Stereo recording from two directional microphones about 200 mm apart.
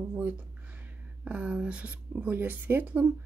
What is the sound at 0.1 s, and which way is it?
Speech, 10° right (ahead or behind).